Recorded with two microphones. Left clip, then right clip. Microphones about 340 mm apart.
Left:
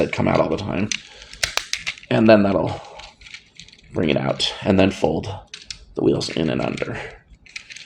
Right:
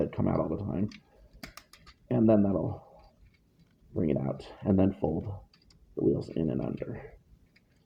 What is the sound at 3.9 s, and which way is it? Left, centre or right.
Speech, right.